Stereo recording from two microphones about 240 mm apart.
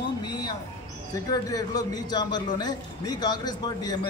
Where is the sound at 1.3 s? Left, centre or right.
Centre.